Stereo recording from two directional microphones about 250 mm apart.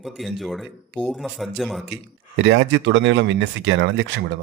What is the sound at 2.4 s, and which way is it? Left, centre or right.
Speech, right.